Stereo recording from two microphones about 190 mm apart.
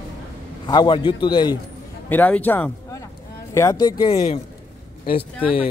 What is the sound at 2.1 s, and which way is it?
A man's voice, 10° left (ahead or behind).